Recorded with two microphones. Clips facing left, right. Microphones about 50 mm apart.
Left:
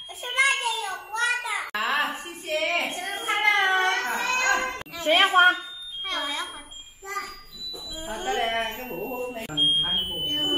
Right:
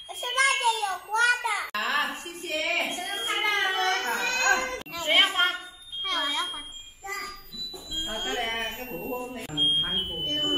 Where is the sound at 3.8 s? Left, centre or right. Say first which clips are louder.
Left 2 dB; left.